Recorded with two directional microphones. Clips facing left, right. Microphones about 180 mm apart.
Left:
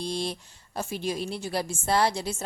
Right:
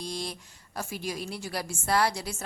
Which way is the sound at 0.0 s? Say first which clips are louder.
Left 5 dB; 30° left (ahead or behind).